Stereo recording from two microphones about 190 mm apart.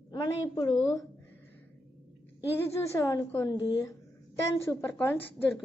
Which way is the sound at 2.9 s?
15° left (ahead or behind).